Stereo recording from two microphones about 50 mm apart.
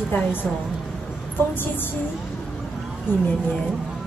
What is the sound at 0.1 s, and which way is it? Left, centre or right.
Speech, left.